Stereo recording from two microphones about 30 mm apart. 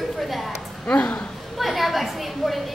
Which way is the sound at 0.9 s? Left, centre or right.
Left.